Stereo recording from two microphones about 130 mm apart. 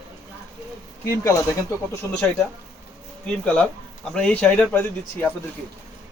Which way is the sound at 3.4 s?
10° left (ahead or behind).